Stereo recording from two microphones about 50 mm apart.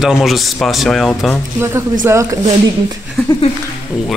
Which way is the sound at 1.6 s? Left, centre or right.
Right.